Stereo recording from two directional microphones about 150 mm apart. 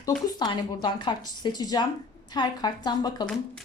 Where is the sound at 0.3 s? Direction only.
30° left (ahead or behind).